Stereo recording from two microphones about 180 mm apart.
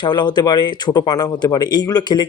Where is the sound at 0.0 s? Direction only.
25° left (ahead or behind).